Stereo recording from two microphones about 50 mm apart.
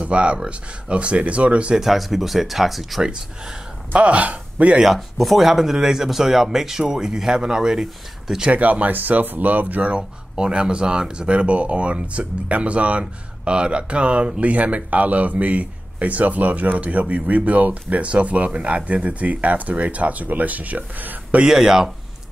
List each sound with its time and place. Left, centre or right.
0.0 s speech: right
1.8 s speech: centre
3.0 s speech: centre
3.9 s speech: right
4.8 s speech: centre
8.5 s speech: right
21.5 s speech: centre